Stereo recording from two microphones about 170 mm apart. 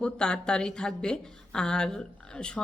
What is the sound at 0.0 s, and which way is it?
Speech, 5° left (ahead or behind).